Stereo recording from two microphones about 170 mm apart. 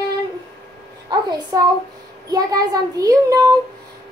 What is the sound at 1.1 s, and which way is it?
A child's voice, 25° right (ahead or behind).